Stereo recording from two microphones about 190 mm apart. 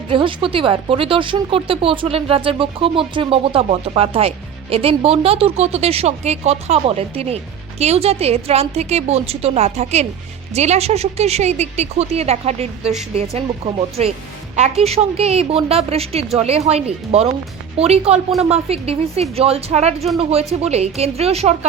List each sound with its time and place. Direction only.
0.1 s speech: 25° right (ahead or behind)